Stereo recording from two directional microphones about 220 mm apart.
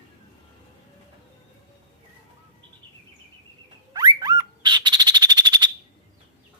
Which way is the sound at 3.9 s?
20° right (ahead or behind).